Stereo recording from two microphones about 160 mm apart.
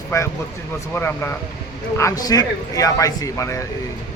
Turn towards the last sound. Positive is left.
turn(degrees=20)  # may be behind; listen again after turning